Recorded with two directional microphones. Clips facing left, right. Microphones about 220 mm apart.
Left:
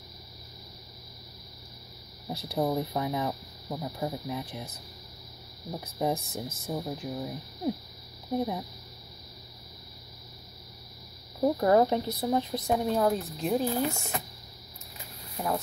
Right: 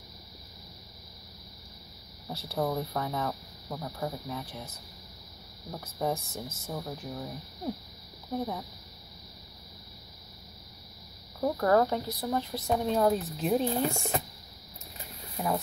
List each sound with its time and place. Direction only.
2.2 s speech: 15° left (ahead or behind)
5.7 s speech: 15° left (ahead or behind)
11.4 s speech: 20° left (ahead or behind)
12.9 s speech: centre (ahead or behind)
15.4 s speech: centre (ahead or behind)